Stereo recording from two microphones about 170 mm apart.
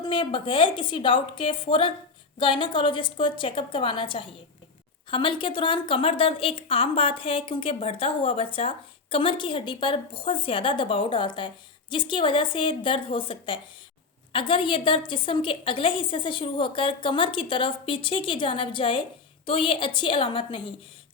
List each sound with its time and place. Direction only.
0.0 s a woman's voice: 30° left (ahead or behind)